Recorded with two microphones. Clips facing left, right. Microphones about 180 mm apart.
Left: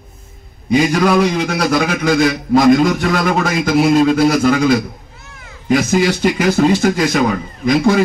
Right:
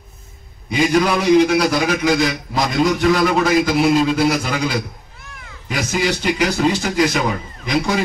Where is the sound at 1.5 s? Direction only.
50° left (ahead or behind).